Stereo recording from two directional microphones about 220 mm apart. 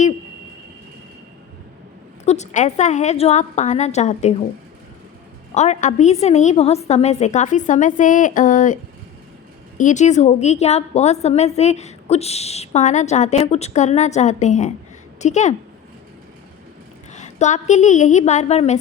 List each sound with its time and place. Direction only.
2.2 s a woman's voice: 30° left (ahead or behind)
5.5 s a woman's voice: 30° left (ahead or behind)
17.1 s a woman's voice: 30° left (ahead or behind)